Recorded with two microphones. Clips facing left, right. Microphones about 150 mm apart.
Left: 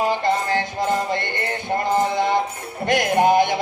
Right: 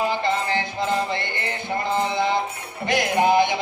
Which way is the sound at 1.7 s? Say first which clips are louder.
Left 3 dB; 45° left (ahead or behind).